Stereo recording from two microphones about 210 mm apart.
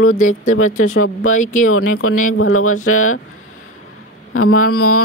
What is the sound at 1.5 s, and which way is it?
Speech, 90° left.